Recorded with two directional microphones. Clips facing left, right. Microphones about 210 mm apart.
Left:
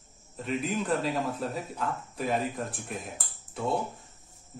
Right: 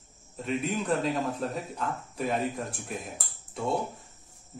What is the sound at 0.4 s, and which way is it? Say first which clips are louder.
A man's voice: even; centre (ahead or behind).